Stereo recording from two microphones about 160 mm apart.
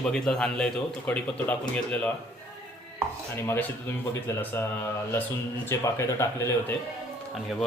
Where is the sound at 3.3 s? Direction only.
15° left (ahead or behind).